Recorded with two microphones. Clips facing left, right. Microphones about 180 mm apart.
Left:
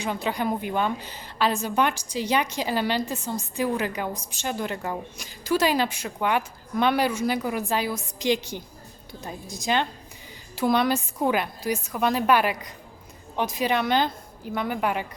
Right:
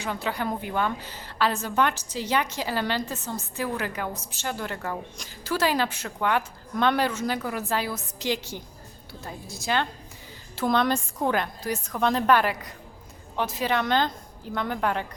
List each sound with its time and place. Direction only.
0.0 s a woman's voice: 15° left (ahead or behind)